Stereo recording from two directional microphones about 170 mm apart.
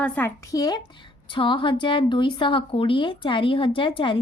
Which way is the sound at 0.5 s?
20° left (ahead or behind).